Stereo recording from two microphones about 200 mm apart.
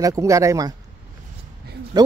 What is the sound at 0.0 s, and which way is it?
Speech, 15° right (ahead or behind).